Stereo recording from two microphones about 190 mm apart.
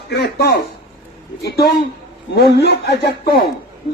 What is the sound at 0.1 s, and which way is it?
Speech, 55° left (ahead or behind).